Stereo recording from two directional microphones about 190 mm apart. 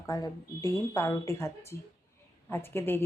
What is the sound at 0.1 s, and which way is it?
Speech, 15° left (ahead or behind).